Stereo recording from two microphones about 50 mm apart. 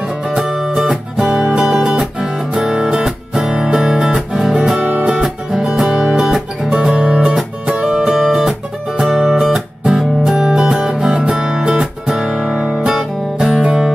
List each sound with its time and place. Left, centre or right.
0.3 s music: centre
0.8 s music: centre
4.8 s music: right
5.1 s music: centre
13.6 s music: right